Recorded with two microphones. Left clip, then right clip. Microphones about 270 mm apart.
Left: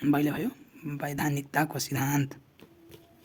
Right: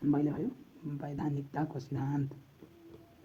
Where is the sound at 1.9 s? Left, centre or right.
Left.